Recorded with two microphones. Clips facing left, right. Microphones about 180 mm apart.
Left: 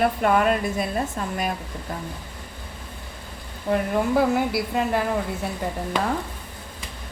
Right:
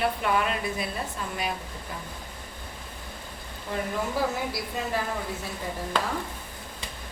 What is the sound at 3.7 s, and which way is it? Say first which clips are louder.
A woman's voice: left 8 dB; 60° left (ahead or behind).